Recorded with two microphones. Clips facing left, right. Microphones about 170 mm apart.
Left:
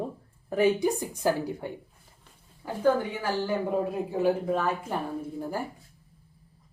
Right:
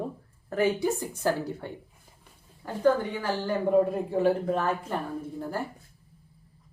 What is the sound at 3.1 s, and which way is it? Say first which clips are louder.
A woman's voice: even; 5° left (ahead or behind).